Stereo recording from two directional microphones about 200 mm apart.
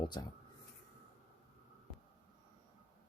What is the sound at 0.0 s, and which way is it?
Speech, 20° left (ahead or behind).